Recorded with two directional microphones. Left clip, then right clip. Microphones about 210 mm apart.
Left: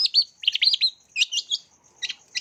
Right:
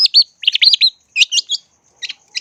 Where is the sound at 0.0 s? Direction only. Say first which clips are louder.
Right 10 dB; 20° right (ahead or behind).